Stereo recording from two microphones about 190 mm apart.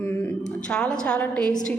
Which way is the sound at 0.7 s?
5° left (ahead or behind).